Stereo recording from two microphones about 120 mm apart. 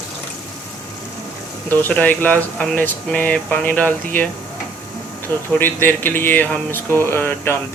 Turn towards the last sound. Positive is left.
turn(degrees=20)  # may be behind; listen again after turning